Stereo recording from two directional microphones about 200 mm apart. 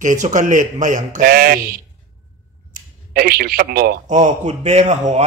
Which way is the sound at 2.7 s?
50° right (ahead or behind).